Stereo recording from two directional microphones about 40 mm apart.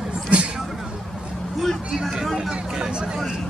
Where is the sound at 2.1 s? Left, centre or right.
Centre.